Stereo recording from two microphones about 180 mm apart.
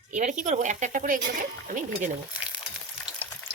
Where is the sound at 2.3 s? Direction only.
5° right (ahead or behind).